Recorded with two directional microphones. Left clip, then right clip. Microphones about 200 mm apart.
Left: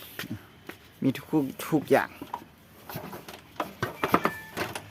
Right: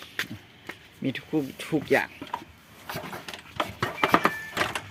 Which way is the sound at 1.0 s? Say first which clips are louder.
Left 2 dB; 25° left (ahead or behind).